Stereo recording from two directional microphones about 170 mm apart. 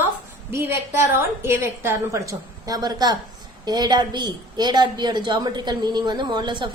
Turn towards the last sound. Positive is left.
turn(degrees=-25)  # may be behind; listen again after turning